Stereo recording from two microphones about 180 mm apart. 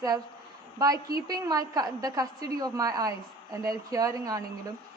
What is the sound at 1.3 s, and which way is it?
A woman's voice, 20° right (ahead or behind).